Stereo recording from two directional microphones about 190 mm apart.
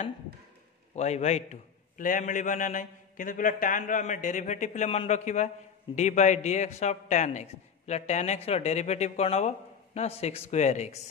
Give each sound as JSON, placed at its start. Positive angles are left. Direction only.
{"t": 0.9, "sound": "a man's voice", "side_deg": 35}